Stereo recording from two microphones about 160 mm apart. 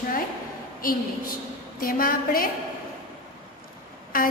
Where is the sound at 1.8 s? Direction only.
60° left (ahead or behind).